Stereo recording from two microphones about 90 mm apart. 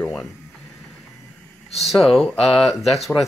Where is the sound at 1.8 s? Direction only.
Centre (ahead or behind).